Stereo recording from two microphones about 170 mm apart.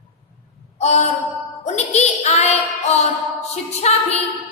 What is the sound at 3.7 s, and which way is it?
Speech, 40° left (ahead or behind).